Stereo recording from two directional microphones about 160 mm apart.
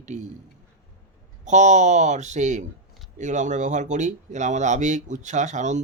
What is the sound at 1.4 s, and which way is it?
Speech, 50° right (ahead or behind).